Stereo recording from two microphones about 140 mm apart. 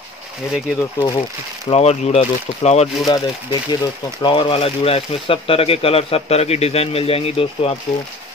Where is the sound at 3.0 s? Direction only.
30° left (ahead or behind).